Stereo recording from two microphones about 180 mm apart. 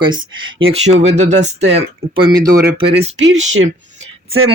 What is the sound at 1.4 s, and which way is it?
Speech, 75° right (ahead or behind).